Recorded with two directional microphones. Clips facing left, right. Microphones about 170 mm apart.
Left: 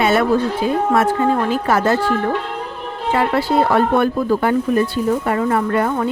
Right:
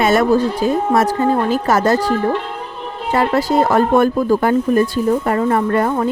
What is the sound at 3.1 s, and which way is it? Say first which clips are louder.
Speech: right 2 dB; 40° right (ahead or behind).